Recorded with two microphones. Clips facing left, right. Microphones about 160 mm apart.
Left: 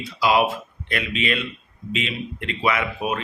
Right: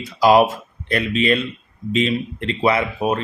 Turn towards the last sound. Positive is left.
turn(degrees=-35)  # may be behind; listen again after turning